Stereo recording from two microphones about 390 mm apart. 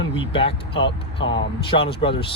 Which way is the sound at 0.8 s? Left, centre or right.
Left.